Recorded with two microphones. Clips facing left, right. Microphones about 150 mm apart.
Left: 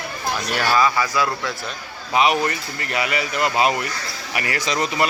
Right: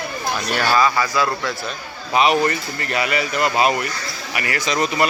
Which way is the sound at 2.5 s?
20° left (ahead or behind).